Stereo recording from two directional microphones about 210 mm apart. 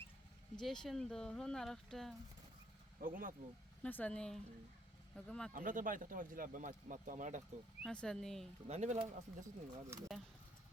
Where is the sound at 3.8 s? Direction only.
5° left (ahead or behind).